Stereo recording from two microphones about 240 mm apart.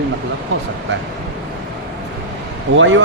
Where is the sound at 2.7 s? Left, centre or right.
Right.